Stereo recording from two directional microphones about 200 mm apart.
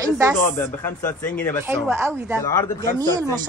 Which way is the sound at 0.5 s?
10° left (ahead or behind).